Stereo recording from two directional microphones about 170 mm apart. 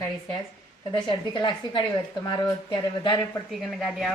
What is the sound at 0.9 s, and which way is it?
A woman's voice, 25° left (ahead or behind).